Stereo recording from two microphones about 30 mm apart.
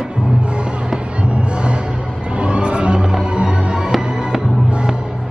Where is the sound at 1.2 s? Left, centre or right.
Right.